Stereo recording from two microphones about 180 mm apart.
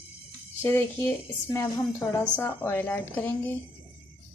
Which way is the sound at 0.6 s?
10° left (ahead or behind).